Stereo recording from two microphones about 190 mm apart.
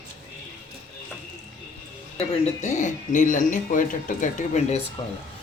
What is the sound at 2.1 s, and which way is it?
Speech, 35° left (ahead or behind).